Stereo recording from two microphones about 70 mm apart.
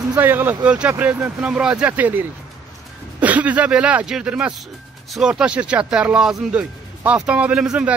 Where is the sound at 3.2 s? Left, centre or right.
Right.